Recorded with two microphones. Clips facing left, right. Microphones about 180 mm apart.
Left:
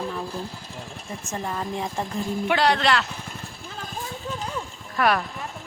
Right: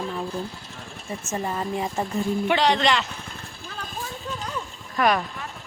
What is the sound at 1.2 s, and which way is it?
Speech, 5° right (ahead or behind).